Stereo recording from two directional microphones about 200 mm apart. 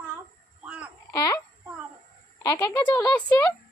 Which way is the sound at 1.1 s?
15° left (ahead or behind).